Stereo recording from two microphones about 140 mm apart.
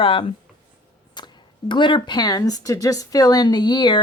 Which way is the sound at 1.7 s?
35° left (ahead or behind).